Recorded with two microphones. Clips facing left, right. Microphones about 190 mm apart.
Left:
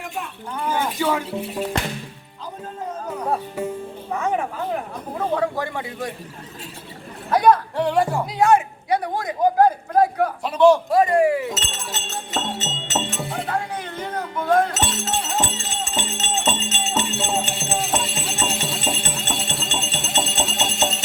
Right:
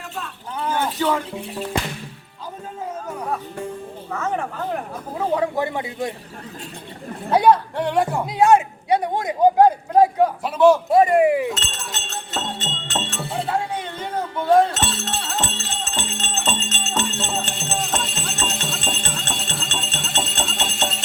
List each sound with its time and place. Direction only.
0.2 s a sound: 10° left (ahead or behind)
4.1 s speech: 10° left (ahead or behind)
5.1 s speech: 15° right (ahead or behind)
7.3 s speech: 20° right (ahead or behind)
7.8 s speech: centre (ahead or behind)
8.3 s a sound: 25° right (ahead or behind)
10.4 s speech: centre (ahead or behind)
10.8 s speech: 25° right (ahead or behind)
11.5 s music: 5° left (ahead or behind)
13.3 s music: 30° right (ahead or behind)
14.7 s music: 5° left (ahead or behind)